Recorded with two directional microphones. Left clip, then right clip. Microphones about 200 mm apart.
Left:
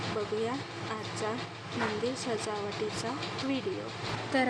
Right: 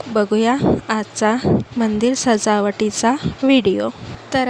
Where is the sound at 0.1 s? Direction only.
55° right (ahead or behind).